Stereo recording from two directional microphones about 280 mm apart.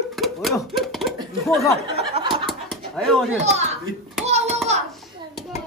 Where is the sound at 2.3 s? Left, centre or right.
Centre.